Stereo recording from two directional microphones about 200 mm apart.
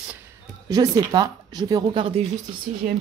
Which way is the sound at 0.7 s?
20° right (ahead or behind).